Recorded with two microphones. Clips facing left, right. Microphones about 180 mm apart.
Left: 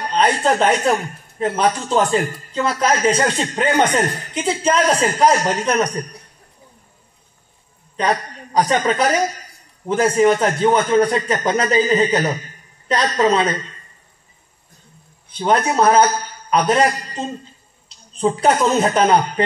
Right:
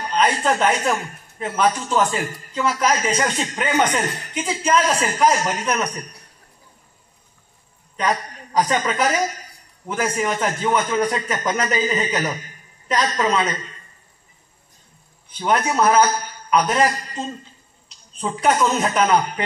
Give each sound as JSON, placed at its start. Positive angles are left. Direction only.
{"t": 0.1, "sound": "a man's voice", "side_deg": 30}
{"t": 8.0, "sound": "a man's voice", "side_deg": 30}
{"t": 15.3, "sound": "a man's voice", "side_deg": 30}